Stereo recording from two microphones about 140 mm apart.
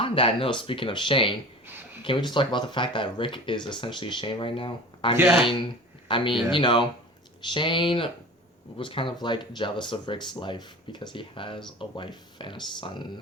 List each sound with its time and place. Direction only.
0.0 s speech: 40° left (ahead or behind)